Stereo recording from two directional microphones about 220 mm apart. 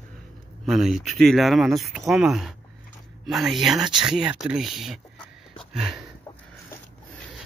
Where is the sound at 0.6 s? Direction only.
Centre (ahead or behind).